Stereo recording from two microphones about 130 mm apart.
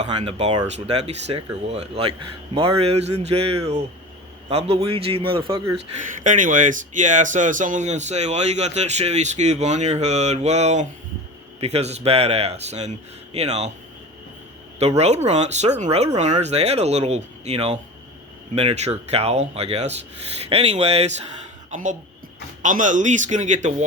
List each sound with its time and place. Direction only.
0.0 s speech: 55° right (ahead or behind); by 5.6 s 40° right (ahead or behind)
6.0 s speech: 80° right; by 13.7 s 55° right (ahead or behind)
14.8 s speech: 55° right (ahead or behind)
21.7 s a woman's voice: 70° right (ahead or behind)